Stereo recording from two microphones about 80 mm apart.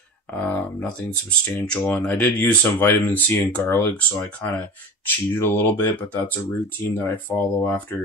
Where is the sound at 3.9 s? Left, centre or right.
Centre.